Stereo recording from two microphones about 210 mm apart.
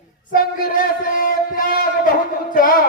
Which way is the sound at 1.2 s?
45° left (ahead or behind).